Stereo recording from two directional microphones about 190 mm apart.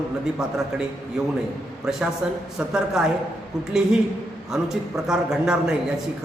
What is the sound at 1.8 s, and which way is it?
A man's voice, 5° right (ahead or behind).